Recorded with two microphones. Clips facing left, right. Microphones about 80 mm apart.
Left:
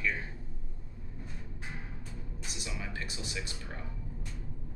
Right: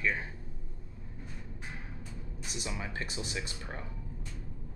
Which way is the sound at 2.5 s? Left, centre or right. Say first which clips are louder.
Right 3 dB; right.